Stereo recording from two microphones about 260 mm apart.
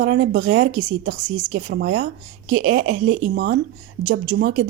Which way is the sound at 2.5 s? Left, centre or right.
Right.